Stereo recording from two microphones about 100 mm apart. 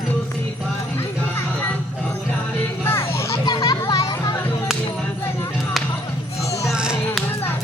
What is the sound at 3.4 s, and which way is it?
Children playing, 45° left (ahead or behind).